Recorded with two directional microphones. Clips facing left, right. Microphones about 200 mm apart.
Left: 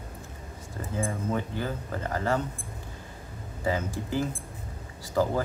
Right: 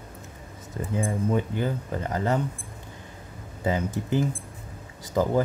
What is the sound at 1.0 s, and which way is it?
Speech, 20° right (ahead or behind).